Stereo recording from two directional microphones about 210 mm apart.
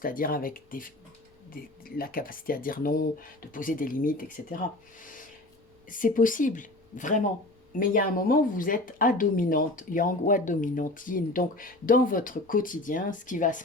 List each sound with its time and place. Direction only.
0.0 s speech: 40° left (ahead or behind)